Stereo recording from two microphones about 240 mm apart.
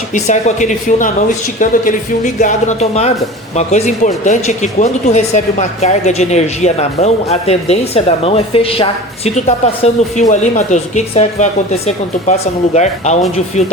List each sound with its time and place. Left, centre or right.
0.1 s speech: left